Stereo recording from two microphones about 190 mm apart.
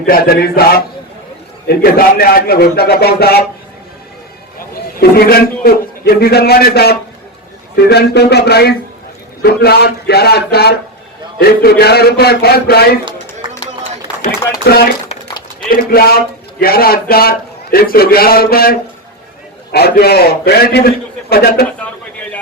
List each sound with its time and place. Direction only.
0.0 s a man's voice: 50° left (ahead or behind)
4.9 s a man's voice: 55° left (ahead or behind)
14.2 s a man's voice: 50° left (ahead or behind)